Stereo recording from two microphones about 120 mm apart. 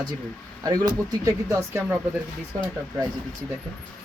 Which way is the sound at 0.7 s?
30° right (ahead or behind).